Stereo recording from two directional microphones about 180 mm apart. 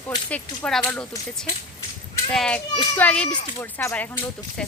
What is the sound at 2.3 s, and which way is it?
Speech, 5° left (ahead or behind).